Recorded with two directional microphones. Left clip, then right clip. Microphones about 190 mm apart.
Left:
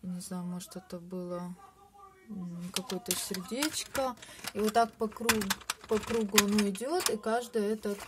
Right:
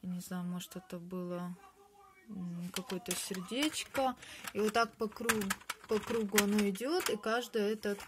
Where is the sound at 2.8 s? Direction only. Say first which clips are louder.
Left 2 dB; 5° right (ahead or behind).